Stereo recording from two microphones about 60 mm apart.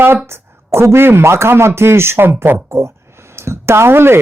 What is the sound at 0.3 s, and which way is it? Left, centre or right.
Speech, right.